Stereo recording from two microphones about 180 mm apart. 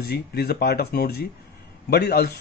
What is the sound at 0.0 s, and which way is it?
A man's voice, 60° left (ahead or behind).